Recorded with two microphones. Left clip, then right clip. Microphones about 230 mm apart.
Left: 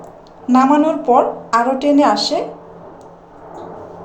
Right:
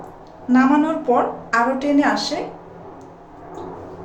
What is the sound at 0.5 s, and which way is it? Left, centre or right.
A woman's voice, left.